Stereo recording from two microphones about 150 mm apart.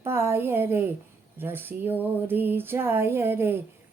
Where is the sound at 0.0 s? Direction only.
15° right (ahead or behind).